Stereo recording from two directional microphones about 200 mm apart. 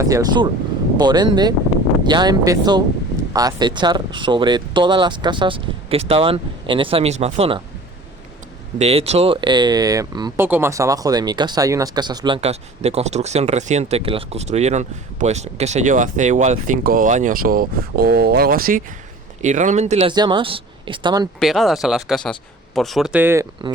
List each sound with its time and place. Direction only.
0.0 s speech: 15° right (ahead or behind)
8.8 s speech: 30° right (ahead or behind)
21.3 s speech: centre (ahead or behind)